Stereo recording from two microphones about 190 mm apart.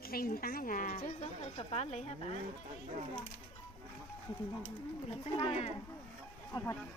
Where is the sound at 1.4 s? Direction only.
30° left (ahead or behind).